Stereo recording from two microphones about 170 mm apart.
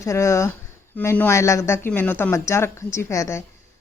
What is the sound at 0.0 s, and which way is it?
A woman's voice, 15° left (ahead or behind).